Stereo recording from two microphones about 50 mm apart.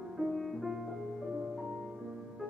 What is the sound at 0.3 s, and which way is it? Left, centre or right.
Music, centre.